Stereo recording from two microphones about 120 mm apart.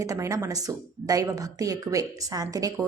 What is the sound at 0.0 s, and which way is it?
A woman's voice, 30° right (ahead or behind).